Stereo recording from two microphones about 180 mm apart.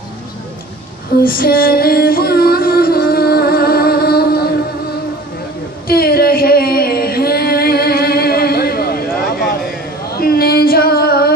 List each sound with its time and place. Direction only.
1.2 s music: 55° left (ahead or behind)
5.9 s a sound: 55° left (ahead or behind)
10.1 s female singing: 60° left (ahead or behind)